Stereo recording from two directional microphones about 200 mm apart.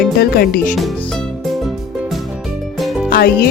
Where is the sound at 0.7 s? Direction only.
Centre (ahead or behind).